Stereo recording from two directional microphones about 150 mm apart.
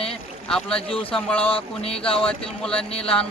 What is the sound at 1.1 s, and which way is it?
Speech, 5° left (ahead or behind).